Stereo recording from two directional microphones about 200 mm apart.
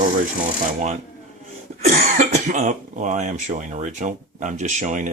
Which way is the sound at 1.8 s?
35° right (ahead or behind).